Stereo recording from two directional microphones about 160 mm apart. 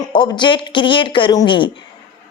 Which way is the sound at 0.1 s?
30° left (ahead or behind).